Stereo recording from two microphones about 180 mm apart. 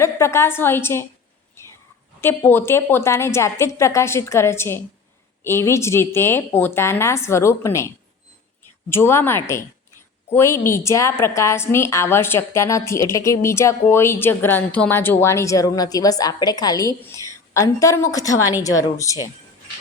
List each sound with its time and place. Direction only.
0.0 s a woman's voice: 15° left (ahead or behind)
2.2 s a woman's voice: 10° left (ahead or behind)